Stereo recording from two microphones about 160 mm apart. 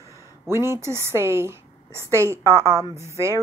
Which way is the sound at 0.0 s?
20° left (ahead or behind).